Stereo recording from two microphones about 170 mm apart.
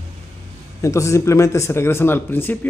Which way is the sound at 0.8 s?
20° left (ahead or behind).